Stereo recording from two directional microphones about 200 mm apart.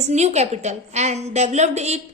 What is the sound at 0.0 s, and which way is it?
A woman's voice, 35° right (ahead or behind).